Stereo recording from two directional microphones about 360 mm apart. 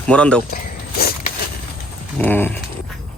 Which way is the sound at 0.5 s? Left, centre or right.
Left.